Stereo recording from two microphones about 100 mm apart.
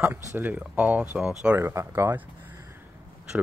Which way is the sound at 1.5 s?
25° right (ahead or behind).